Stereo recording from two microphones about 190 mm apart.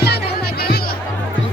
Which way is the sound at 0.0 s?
55° left (ahead or behind).